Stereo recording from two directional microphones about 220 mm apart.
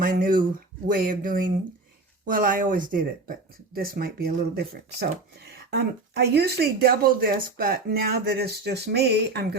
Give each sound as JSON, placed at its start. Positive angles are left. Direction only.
{"t": 0.0, "sound": "speech", "side_deg": -40}